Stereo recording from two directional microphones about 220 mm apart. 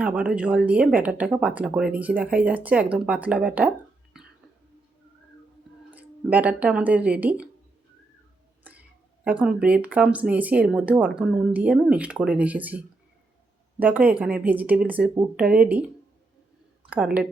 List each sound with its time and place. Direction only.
0.0 s speech: 5° right (ahead or behind)
5.9 s speech: 5° right (ahead or behind)
9.2 s speech: 5° right (ahead or behind)